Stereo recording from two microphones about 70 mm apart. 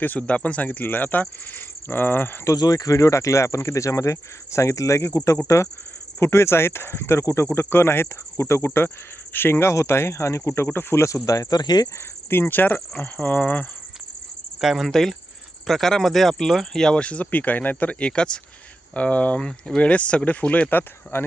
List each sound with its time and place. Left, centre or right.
0.0 s speech: left
2.6 s speech: left
10.7 s speech: left
11.1 s speech: left
11.9 s speech: left
14.6 s speech: centre; by 21.2 s left